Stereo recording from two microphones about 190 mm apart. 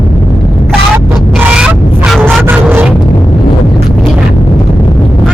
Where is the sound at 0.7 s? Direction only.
5° right (ahead or behind).